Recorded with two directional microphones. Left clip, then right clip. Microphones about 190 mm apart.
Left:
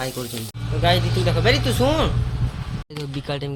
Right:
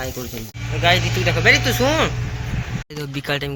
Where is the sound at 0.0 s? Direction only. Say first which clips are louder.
Left 1 dB; 5° left (ahead or behind).